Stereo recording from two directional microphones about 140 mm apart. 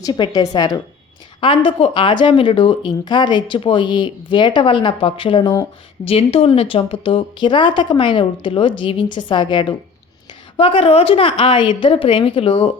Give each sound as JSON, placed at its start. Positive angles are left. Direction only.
{"t": 0.0, "sound": "speech", "side_deg": 30}